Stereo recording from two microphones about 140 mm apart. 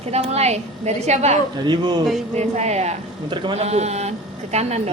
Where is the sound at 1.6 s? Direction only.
30° right (ahead or behind).